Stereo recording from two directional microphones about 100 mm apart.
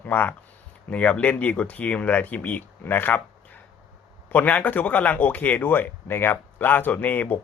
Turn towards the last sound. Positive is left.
turn(degrees=15)  # may be behind; listen again after turning